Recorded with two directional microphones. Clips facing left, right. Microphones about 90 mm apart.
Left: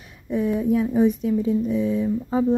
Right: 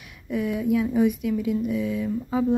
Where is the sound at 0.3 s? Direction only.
30° left (ahead or behind).